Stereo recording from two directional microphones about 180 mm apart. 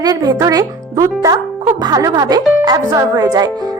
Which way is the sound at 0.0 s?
20° right (ahead or behind).